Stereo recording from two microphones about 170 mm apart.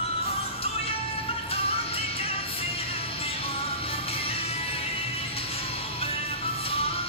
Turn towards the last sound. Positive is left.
turn(degrees=35)  # may be behind; listen again after turning